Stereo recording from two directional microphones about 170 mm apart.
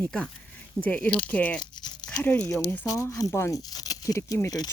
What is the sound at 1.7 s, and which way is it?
Crumpling, 25° left (ahead or behind).